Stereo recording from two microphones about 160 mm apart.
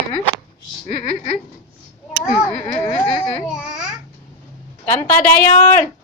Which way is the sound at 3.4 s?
5° right (ahead or behind).